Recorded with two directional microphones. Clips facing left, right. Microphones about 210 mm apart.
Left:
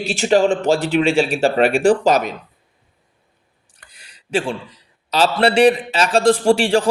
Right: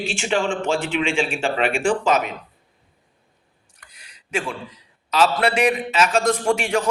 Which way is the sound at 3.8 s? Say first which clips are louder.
Left 2 dB; 30° left (ahead or behind).